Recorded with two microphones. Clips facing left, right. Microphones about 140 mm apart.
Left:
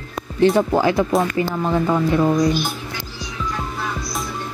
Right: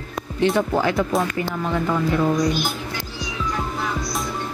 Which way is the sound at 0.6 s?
30° left (ahead or behind).